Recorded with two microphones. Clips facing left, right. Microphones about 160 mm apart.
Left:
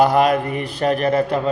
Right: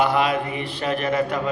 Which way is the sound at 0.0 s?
40° left (ahead or behind).